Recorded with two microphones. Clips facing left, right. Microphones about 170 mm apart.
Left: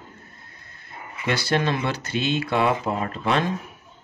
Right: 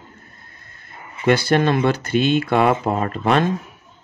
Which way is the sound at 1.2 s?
50° right (ahead or behind).